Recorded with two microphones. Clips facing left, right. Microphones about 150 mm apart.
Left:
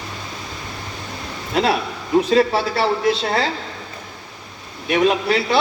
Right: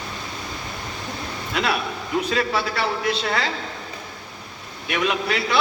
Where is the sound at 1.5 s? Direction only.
35° left (ahead or behind).